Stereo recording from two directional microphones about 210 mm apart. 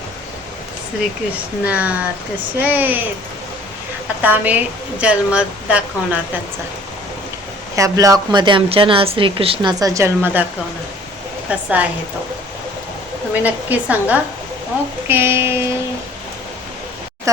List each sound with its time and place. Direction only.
1.6 s speech: 5° right (ahead or behind)
4.2 s speech: 5° right (ahead or behind)
7.8 s a woman's voice: 15° right (ahead or behind)
11.4 s speech: 5° right (ahead or behind)
13.3 s speech: 10° right (ahead or behind)